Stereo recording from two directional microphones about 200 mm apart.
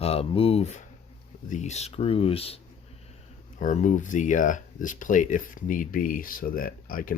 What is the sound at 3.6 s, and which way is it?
Speech, 40° left (ahead or behind).